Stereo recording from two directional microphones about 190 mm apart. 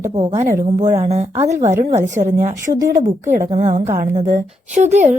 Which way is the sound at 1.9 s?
40° right (ahead or behind).